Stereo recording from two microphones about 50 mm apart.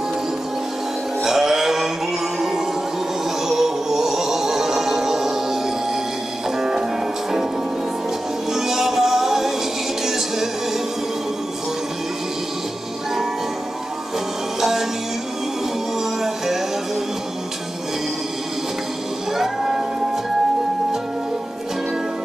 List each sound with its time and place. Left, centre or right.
1.2 s music: centre
3.3 s music: centre
6.6 s music: centre
8.5 s music: centre
14.6 s music: centre
16.0 s music: centre
19.3 s music: centre